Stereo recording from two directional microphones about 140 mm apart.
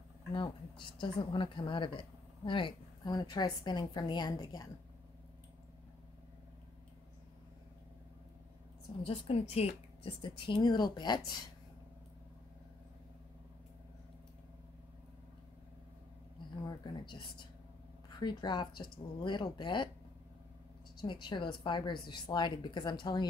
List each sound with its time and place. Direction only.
0.3 s a woman's voice: 35° left (ahead or behind)
9.0 s a woman's voice: 45° left (ahead or behind)
16.6 s a woman's voice: 35° left (ahead or behind)
21.0 s a woman's voice: 35° left (ahead or behind)